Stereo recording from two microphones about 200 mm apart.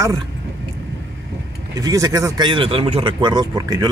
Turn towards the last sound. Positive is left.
turn(degrees=-20)  # may be behind; listen again after turning